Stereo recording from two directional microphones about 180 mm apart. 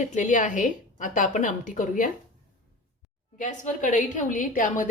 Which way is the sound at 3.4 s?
45° left (ahead or behind).